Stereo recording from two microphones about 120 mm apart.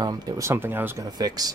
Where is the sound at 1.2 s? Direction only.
35° right (ahead or behind).